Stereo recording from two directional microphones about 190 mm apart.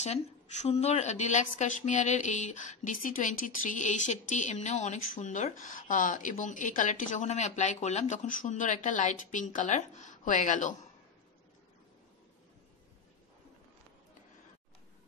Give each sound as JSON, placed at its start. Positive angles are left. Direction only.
{"t": 0.0, "sound": "a woman's voice", "side_deg": 35}